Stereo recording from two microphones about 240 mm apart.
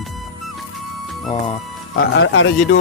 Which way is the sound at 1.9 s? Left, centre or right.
Left.